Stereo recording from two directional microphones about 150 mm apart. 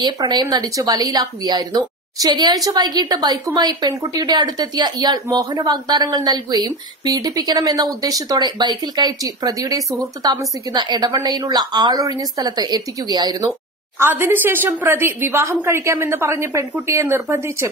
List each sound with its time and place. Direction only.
0.0 s speech: 30° right (ahead or behind)
13.9 s a woman's voice: 15° right (ahead or behind)